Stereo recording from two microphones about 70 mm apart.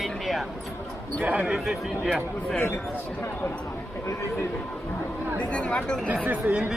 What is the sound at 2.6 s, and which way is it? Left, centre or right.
Speech, left.